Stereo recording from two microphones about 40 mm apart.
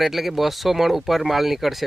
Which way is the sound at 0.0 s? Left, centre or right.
Centre.